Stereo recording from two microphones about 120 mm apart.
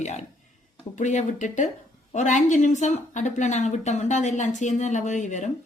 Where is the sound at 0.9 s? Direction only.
90° left.